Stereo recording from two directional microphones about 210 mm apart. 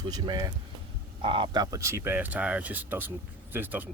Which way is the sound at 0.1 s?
20° right (ahead or behind).